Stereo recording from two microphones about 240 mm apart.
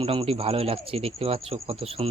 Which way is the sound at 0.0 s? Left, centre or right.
Right.